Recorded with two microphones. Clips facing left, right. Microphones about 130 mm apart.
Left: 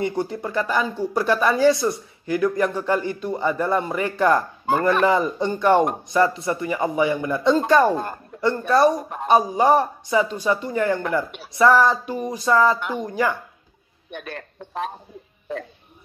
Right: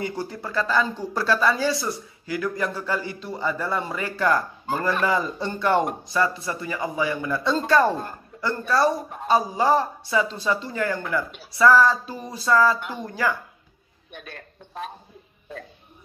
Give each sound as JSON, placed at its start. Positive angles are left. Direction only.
{"t": 0.0, "sound": "speech", "side_deg": 25}
{"t": 4.6, "sound": "chopping", "side_deg": 65}
{"t": 5.0, "sound": "speech", "side_deg": 20}
{"t": 14.1, "sound": "a man's voice", "side_deg": 70}